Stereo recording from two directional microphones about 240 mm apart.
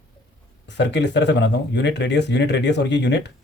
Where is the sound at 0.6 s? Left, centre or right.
Left.